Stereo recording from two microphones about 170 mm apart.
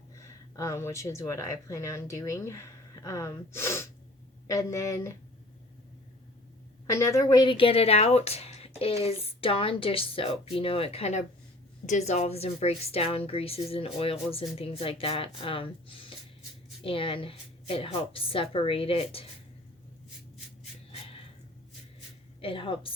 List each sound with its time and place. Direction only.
0.2 s speech: 20° left (ahead or behind)
6.8 s speech: 15° left (ahead or behind); by 19.2 s 35° left (ahead or behind)
22.4 s a woman's voice: 30° left (ahead or behind)